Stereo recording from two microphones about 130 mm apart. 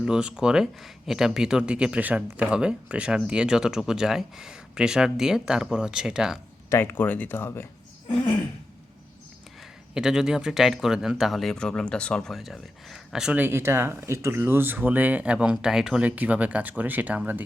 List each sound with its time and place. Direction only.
0.0 s speech: 5° right (ahead or behind)
6.7 s speech: 15° left (ahead or behind)
9.9 s speech: 5° right (ahead or behind)